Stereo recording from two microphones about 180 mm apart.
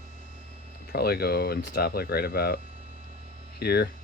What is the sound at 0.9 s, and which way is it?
Speech, 60° left (ahead or behind).